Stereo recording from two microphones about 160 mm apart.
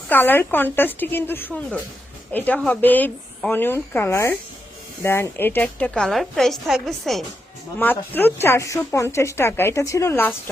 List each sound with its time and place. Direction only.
0.1 s a woman's voice: 10° left (ahead or behind)
7.8 s speech: 10° left (ahead or behind)